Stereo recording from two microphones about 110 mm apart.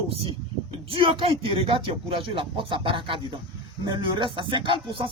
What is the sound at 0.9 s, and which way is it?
Speech, 55° right (ahead or behind).